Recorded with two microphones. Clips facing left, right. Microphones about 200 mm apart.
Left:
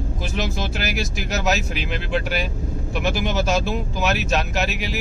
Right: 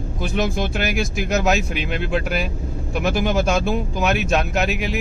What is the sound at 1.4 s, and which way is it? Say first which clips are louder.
Speech: right 3 dB; centre (ahead or behind).